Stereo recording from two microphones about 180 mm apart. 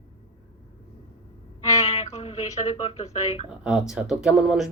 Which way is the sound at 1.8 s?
35° left (ahead or behind).